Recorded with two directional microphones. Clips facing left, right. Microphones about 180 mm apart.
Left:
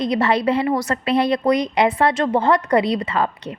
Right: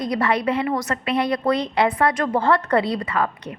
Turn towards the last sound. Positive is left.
turn(degrees=25)  # may be behind; listen again after turning